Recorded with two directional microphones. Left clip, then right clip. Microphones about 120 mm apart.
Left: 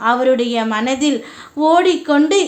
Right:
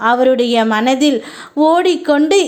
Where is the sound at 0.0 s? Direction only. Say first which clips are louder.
Right 3 dB; 45° right (ahead or behind).